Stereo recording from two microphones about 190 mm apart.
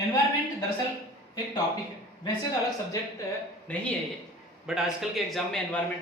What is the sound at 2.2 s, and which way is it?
Speech, 20° left (ahead or behind).